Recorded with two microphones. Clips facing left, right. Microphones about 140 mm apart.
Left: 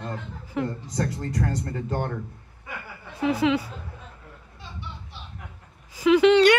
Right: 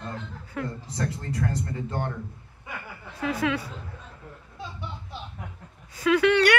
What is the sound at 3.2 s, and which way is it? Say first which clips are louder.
Speech: left 5 dB; 20° left (ahead or behind).